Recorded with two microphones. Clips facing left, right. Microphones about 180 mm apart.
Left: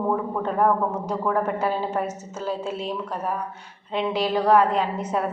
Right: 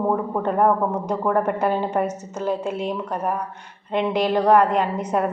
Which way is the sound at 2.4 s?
55° right (ahead or behind).